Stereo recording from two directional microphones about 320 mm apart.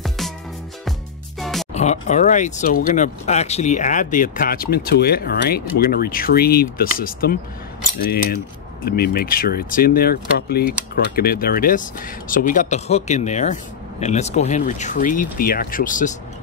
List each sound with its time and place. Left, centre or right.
1.4 s music: centre
1.7 s speech: left